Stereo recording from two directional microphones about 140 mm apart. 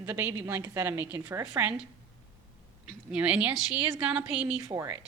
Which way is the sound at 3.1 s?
10° right (ahead or behind).